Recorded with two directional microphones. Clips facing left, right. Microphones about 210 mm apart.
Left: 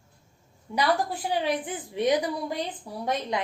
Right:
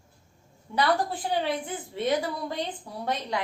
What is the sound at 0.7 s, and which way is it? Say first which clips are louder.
A woman's voice: even; 15° left (ahead or behind).